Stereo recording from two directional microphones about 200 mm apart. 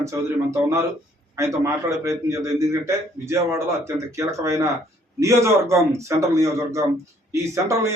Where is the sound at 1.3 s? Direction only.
15° right (ahead or behind).